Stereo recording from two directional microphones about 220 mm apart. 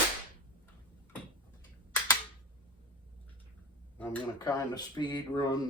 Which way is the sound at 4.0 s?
5° left (ahead or behind).